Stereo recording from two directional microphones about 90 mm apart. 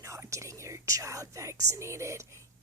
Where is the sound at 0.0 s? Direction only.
35° right (ahead or behind).